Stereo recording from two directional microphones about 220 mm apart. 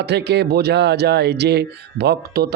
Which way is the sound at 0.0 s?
50° right (ahead or behind).